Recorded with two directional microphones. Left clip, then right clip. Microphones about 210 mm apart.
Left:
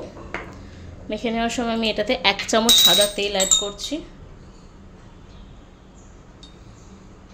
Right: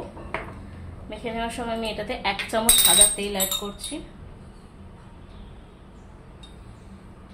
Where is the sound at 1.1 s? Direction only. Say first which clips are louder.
Left 6 dB; 50° left (ahead or behind).